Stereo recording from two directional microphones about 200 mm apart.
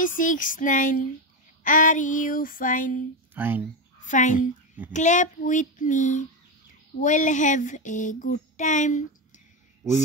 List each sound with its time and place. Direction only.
0.0 s child singing: 40° left (ahead or behind)
3.3 s speech: 10° right (ahead or behind)
4.0 s a child's voice: 40° left (ahead or behind)
4.9 s child singing: 40° left (ahead or behind)